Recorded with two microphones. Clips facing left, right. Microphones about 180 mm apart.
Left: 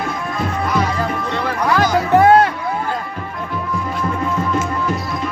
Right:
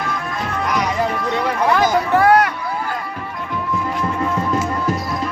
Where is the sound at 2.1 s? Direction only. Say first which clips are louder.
Left 4 dB; 25° left (ahead or behind).